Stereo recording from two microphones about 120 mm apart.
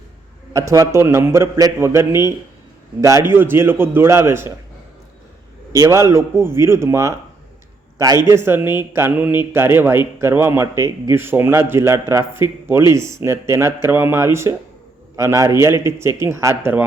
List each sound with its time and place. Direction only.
0.5 s speech: 25° right (ahead or behind)
5.7 s a man's voice: 25° right (ahead or behind)